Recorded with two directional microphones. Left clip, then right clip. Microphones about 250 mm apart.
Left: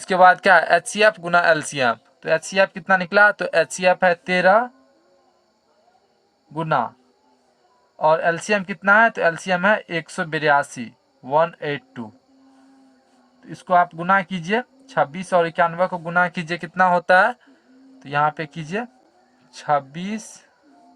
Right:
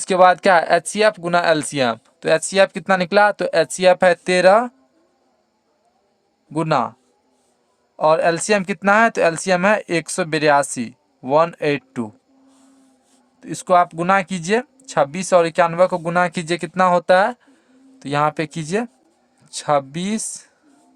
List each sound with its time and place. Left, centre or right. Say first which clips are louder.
0.0 s speech: right 1 dB; right
6.5 s speech: right 2 dB; right
7.9 s speech: right 2 dB; right
13.4 s speech: right 2 dB; right